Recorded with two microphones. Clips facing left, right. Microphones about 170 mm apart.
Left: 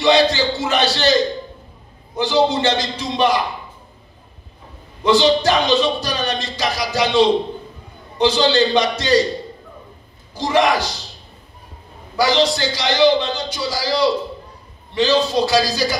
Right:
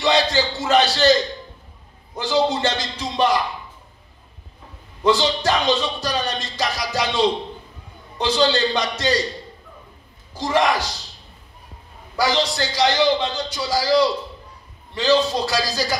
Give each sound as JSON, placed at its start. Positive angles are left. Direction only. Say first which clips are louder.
{"t": 0.0, "sound": "a man's voice", "louder": "left 4 dB", "side_deg": 70}
{"t": 2.2, "sound": "a man's voice", "louder": "left 3 dB", "side_deg": 75}
{"t": 5.0, "sound": "a man's voice", "louder": "left 4 dB", "side_deg": 80}
{"t": 10.3, "sound": "a man's voice", "louder": "left 3 dB", "side_deg": 85}
{"t": 12.2, "sound": "a man's voice", "louder": "left 4 dB", "side_deg": 80}